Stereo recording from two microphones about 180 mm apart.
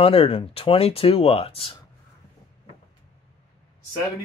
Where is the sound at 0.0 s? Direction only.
30° left (ahead or behind).